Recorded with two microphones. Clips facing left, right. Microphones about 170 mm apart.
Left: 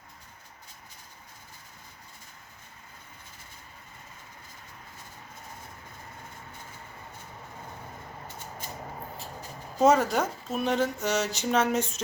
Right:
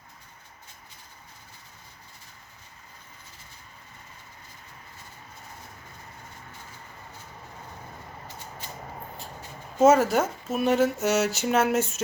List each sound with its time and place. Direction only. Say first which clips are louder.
9.7 s speech: right 3 dB; 5° right (ahead or behind)